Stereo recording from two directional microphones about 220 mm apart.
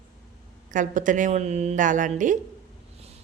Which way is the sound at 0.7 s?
35° right (ahead or behind).